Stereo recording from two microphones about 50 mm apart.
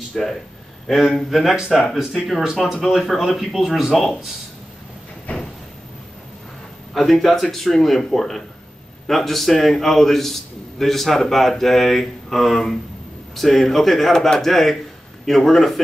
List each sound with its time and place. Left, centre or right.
0.1 s a man's voice: centre
3.0 s a man's voice: centre
5.3 s a sound: left
6.9 s a man's voice: centre